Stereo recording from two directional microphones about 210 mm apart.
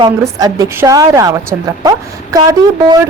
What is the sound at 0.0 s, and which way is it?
A woman's voice, 15° right (ahead or behind).